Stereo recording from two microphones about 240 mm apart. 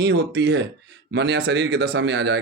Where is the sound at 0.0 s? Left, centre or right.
Right.